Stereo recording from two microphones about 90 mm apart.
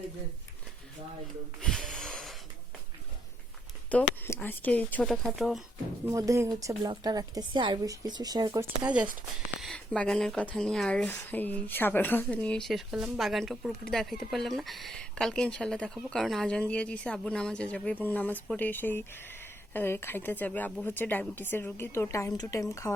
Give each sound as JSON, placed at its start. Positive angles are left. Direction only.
{"t": 1.6, "sound": "a sound", "side_deg": 5}
{"t": 3.9, "sound": "speech", "side_deg": 15}
{"t": 5.0, "sound": "speech", "side_deg": 0}
{"t": 6.1, "sound": "speech", "side_deg": -35}
{"t": 8.8, "sound": "speech", "side_deg": -15}
{"t": 9.7, "sound": "speech", "side_deg": 10}
{"t": 12.7, "sound": "speech", "side_deg": -5}